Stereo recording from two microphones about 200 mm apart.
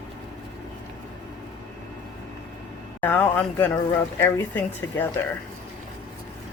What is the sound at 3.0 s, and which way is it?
Speech, 10° left (ahead or behind).